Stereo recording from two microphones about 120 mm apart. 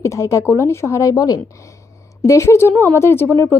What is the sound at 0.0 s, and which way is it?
Speech, 25° left (ahead or behind).